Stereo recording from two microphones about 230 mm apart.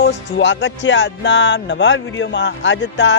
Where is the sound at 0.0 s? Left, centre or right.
Left.